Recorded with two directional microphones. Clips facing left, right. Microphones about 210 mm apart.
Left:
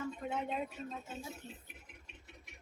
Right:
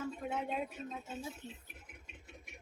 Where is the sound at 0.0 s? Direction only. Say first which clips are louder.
Even; centre (ahead or behind).